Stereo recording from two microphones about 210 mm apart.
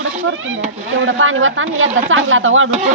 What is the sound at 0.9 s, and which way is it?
Speech, 70° right (ahead or behind).